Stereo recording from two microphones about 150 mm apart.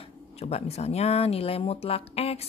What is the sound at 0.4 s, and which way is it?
Speech, 45° left (ahead or behind).